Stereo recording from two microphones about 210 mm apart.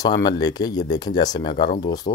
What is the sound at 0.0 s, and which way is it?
Speech, 20° left (ahead or behind).